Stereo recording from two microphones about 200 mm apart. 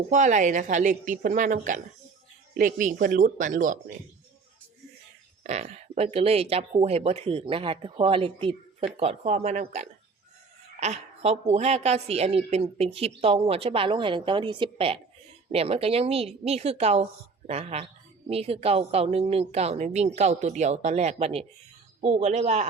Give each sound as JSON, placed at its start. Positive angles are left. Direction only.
{"t": 0.1, "sound": "a woman's voice", "side_deg": -35}
{"t": 5.4, "sound": "a woman's voice", "side_deg": -35}